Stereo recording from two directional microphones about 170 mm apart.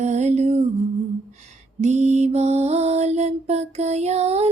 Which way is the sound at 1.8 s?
40° right (ahead or behind).